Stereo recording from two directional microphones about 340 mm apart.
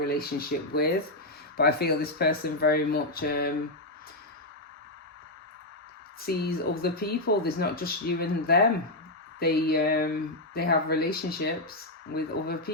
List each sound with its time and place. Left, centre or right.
0.0 s speech: left
6.3 s speech: left